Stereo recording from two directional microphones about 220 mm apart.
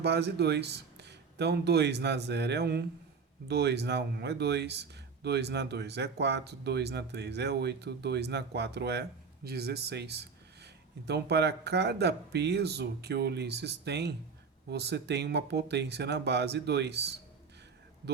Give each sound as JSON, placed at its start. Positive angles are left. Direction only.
{"t": 0.0, "sound": "speech", "side_deg": -50}